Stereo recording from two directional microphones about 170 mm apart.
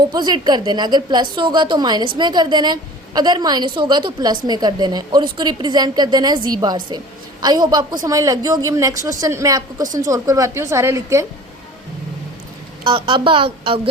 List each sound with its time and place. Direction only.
0.1 s a woman's voice: 25° right (ahead or behind)
12.8 s a woman's voice: 30° right (ahead or behind)